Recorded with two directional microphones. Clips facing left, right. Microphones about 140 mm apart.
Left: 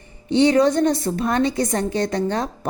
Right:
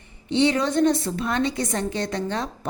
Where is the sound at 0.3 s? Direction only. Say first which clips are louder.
Left 5 dB; 40° left (ahead or behind).